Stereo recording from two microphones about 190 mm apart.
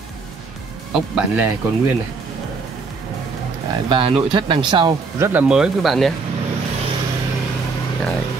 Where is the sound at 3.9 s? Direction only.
25° right (ahead or behind).